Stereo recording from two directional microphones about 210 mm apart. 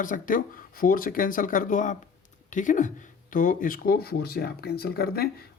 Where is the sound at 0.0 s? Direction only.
40° left (ahead or behind).